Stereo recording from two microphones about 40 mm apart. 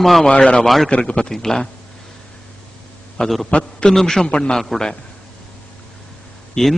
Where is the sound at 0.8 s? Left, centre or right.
Left.